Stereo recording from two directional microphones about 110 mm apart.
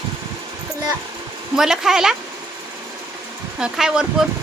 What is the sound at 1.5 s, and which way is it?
Speech, 5° right (ahead or behind).